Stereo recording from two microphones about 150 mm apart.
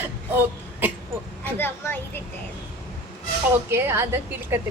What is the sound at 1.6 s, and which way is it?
Speech, 15° left (ahead or behind).